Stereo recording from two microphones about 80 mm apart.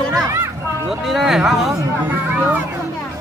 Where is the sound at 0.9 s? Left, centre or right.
Centre.